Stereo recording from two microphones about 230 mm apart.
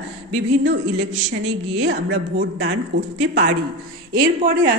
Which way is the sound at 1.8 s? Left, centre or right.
Right.